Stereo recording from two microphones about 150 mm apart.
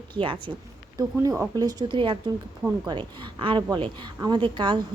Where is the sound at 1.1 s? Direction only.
15° right (ahead or behind).